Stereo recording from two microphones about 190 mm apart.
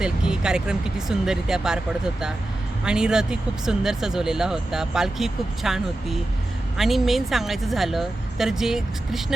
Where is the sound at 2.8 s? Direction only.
5° right (ahead or behind).